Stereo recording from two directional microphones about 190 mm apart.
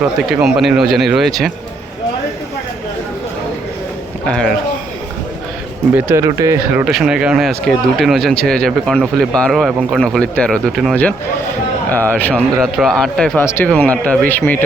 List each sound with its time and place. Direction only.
0.3 s a man's voice: 5° right (ahead or behind)
5.9 s speech: 10° right (ahead or behind)
6.8 s a man's voice: 5° right (ahead or behind)